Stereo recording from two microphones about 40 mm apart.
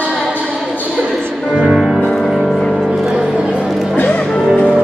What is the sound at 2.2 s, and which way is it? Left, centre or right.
Music, centre.